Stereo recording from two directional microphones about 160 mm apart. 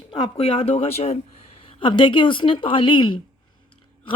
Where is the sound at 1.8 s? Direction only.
30° left (ahead or behind).